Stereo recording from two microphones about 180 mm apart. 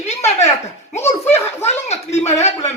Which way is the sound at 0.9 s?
15° left (ahead or behind).